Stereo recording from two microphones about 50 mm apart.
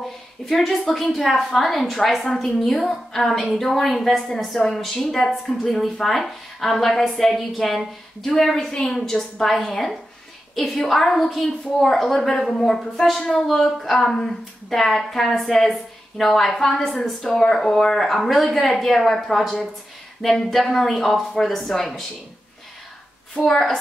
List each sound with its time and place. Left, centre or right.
0.5 s a woman's voice: centre
23.3 s a woman's voice: centre